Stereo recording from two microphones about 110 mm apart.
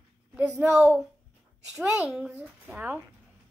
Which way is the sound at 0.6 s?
10° right (ahead or behind).